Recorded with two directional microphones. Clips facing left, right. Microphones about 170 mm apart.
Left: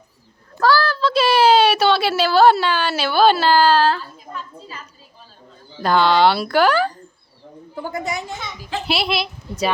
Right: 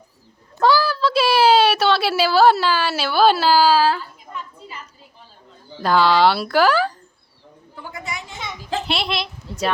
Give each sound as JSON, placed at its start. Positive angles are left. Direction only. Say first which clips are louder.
{"t": 0.6, "sound": "a sound", "louder": "even", "side_deg": -15}
{"t": 5.8, "sound": "speech", "louder": "left 1 dB", "side_deg": -5}
{"t": 7.8, "sound": "a woman's voice", "louder": "left 7 dB", "side_deg": 40}
{"t": 8.9, "sound": "speech", "louder": "left 3 dB", "side_deg": 5}